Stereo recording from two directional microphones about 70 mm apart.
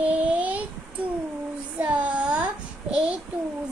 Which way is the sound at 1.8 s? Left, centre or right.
Centre.